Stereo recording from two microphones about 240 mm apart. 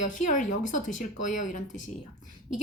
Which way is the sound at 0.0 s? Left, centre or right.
Left.